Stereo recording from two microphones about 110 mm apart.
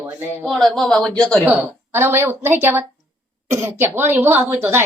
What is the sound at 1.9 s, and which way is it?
Speech, 20° right (ahead or behind).